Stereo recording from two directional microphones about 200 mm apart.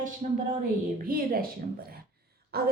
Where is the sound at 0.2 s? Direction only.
35° right (ahead or behind).